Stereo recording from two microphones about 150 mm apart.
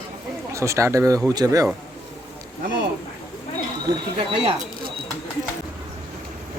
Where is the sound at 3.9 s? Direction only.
20° right (ahead or behind).